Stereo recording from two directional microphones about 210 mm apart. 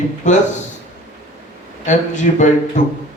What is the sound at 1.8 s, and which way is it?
Speech, 35° left (ahead or behind).